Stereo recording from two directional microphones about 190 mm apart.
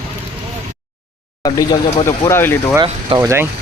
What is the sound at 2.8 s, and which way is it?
Speech, 15° right (ahead or behind).